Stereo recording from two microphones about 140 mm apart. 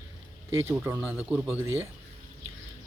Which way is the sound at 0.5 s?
20° right (ahead or behind).